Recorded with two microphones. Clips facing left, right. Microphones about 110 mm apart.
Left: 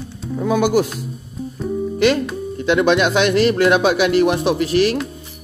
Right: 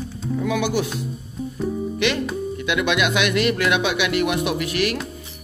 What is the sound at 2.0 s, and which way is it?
A man's voice, 35° left (ahead or behind).